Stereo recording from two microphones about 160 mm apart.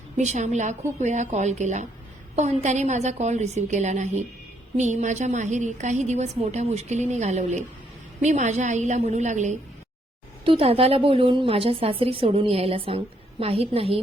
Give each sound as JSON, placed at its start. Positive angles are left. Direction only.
{"t": 0.2, "sound": "a woman's voice", "side_deg": -45}
{"t": 10.4, "sound": "a woman's voice", "side_deg": -35}